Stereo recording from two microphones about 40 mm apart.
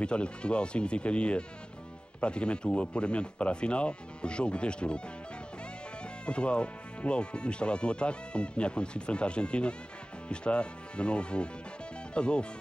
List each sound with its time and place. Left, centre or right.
0.0 s speech: left
6.2 s speech: left